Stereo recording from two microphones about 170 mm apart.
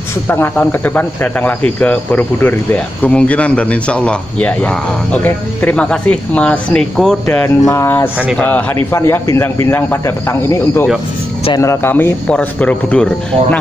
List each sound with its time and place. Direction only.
0.3 s speech: 10° left (ahead or behind)